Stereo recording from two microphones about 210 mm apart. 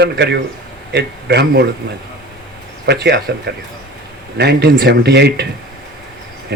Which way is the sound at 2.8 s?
50° right (ahead or behind).